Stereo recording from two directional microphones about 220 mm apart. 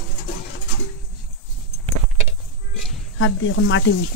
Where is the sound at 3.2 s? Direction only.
60° left (ahead or behind).